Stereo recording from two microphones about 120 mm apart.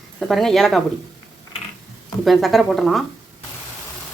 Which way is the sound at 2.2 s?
Centre (ahead or behind).